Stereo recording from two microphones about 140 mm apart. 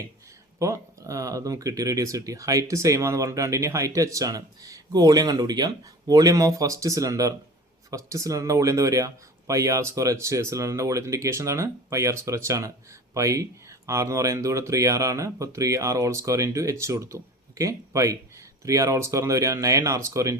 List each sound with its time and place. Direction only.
0.6 s speech: 25° right (ahead or behind)